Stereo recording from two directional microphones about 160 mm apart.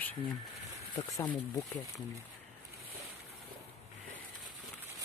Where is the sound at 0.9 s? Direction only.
25° left (ahead or behind).